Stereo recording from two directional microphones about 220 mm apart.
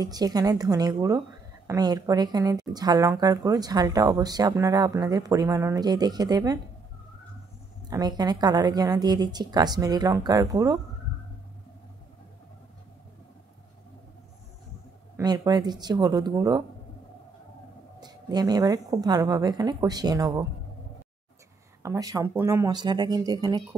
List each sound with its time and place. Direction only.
0.0 s speech: 15° right (ahead or behind)
7.9 s speech: 15° right (ahead or behind)
15.1 s speech: 15° right (ahead or behind)
18.0 s speech: 20° right (ahead or behind)
21.8 s speech: 15° right (ahead or behind)